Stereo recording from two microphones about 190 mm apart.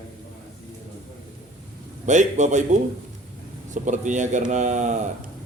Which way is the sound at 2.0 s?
40° right (ahead or behind).